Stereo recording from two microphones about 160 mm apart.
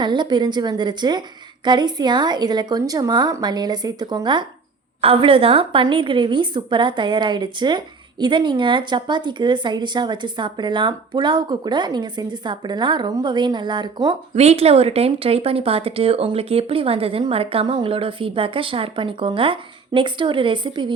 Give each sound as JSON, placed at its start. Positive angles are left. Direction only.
{"t": 0.0, "sound": "speech", "side_deg": -30}
{"t": 14.3, "sound": "speech", "side_deg": -40}